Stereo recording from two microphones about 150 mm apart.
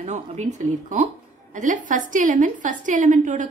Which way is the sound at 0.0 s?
50° right (ahead or behind).